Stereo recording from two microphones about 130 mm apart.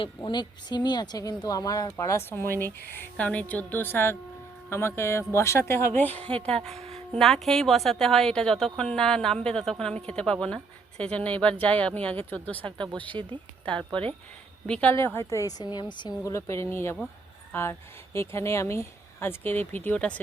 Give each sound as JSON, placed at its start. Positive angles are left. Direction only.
{"t": 0.2, "sound": "a woman's voice", "side_deg": 35}
{"t": 6.7, "sound": "a sound", "side_deg": -55}
{"t": 7.1, "sound": "a woman's voice", "side_deg": 5}
{"t": 13.1, "sound": "speech", "side_deg": -35}
{"t": 14.7, "sound": "speech", "side_deg": 10}
{"t": 16.2, "sound": "speech", "side_deg": 20}